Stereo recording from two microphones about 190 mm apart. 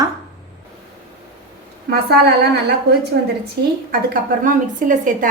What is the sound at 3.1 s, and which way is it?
Speech, 55° right (ahead or behind).